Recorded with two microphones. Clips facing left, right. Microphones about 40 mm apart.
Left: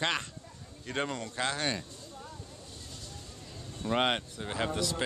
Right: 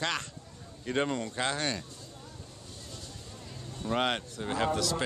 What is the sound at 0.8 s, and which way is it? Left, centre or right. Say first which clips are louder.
Speech: right 4 dB; centre.